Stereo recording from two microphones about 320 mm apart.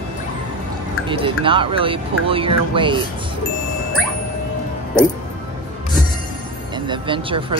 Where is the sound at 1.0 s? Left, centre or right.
Centre.